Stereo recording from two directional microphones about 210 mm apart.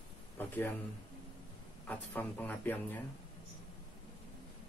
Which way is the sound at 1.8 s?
10° left (ahead or behind).